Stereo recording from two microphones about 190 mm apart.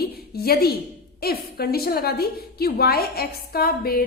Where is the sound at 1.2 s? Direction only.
55° left (ahead or behind).